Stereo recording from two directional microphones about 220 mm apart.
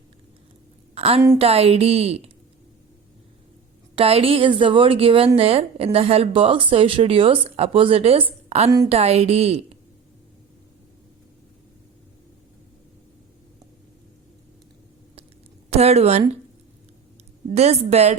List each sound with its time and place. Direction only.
0.9 s a woman's voice: 25° right (ahead or behind)
3.9 s a woman's voice: 25° right (ahead or behind)
15.7 s a woman's voice: 30° right (ahead or behind)
17.5 s a woman's voice: 30° right (ahead or behind)